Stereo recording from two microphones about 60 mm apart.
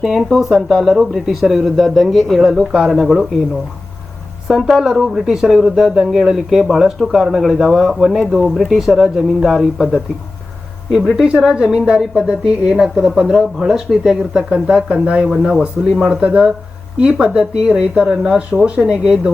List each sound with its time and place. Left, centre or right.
0.0 s speech: centre
4.4 s speech: centre
11.3 s speech: centre